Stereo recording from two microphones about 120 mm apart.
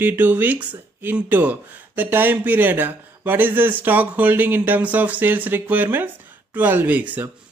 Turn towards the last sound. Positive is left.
turn(degrees=-15)  # may be behind; listen again after turning